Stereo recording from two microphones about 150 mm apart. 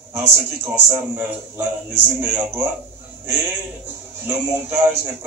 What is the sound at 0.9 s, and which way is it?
Speech, 15° right (ahead or behind).